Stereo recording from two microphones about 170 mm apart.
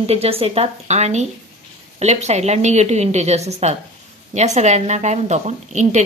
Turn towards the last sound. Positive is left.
turn(degrees=-45)  # may be behind; listen again after turning